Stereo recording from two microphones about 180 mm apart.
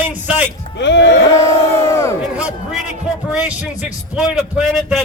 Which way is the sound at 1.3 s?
15° left (ahead or behind).